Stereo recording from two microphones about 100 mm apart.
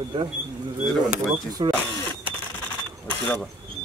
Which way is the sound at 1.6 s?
55° right (ahead or behind).